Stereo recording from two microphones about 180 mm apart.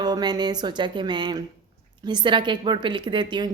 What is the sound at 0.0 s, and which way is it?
A woman's voice, 25° right (ahead or behind).